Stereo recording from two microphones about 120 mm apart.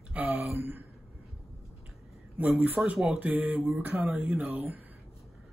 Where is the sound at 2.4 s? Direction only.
15° right (ahead or behind).